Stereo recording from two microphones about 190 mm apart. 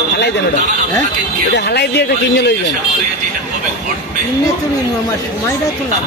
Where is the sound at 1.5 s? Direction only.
60° left (ahead or behind).